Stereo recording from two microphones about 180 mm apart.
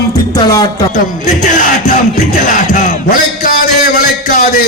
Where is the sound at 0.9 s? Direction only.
45° left (ahead or behind).